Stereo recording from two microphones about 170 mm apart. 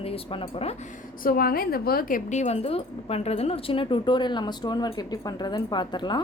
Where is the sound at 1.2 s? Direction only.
60° left (ahead or behind).